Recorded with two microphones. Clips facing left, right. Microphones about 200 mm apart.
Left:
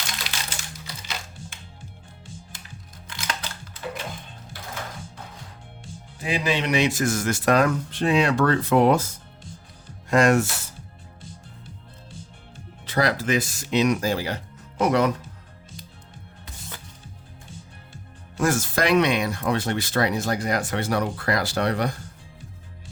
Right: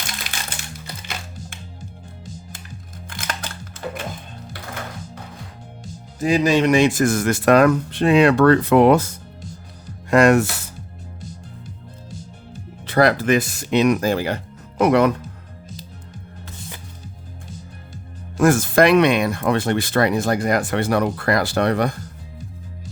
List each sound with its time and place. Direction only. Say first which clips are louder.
0.3 s music: right 2 dB; 50° right (ahead or behind)
2.2 s music: right 5 dB; 40° right (ahead or behind)
3.1 s music: right 2 dB; 50° right (ahead or behind)
5.8 s speech: right 10 dB; 40° right (ahead or behind); by 10.5 s 60° right (ahead or behind)
11.2 s music: right 6 dB; 40° right (ahead or behind)
12.8 s speech: right 7 dB; 60° right (ahead or behind)
18.4 s speech: right 8 dB; 55° right (ahead or behind)